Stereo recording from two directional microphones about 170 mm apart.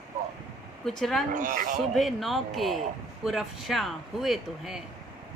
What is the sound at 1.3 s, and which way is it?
Speech, 50° right (ahead or behind).